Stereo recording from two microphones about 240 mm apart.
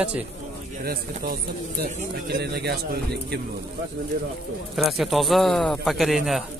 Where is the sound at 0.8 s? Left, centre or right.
Right.